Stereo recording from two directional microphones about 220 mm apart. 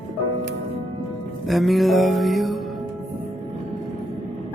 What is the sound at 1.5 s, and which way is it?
Music, centre (ahead or behind).